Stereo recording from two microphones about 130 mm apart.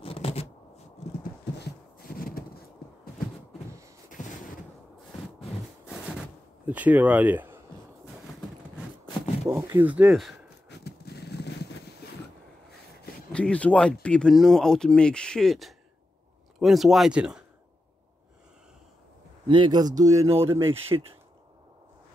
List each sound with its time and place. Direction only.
0.0 s shuffling cards: 45° left (ahead or behind)
5.9 s a sound: 5° right (ahead or behind)
6.7 s speech: 10° right (ahead or behind)
9.5 s speech: 15° right (ahead or behind)
13.3 s speech: 10° left (ahead or behind); by 17.5 s 5° right (ahead or behind)
19.4 s speech: 35° right (ahead or behind)
20.0 s speech: 25° right (ahead or behind)